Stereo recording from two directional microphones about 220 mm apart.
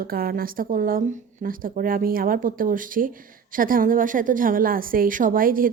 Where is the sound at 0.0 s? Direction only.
40° right (ahead or behind).